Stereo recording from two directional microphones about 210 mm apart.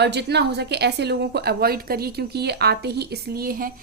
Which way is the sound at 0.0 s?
50° right (ahead or behind).